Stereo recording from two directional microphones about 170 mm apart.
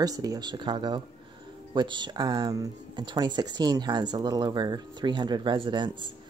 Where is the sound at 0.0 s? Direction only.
20° right (ahead or behind).